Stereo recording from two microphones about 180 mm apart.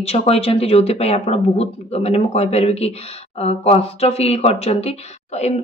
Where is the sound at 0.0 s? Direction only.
35° left (ahead or behind).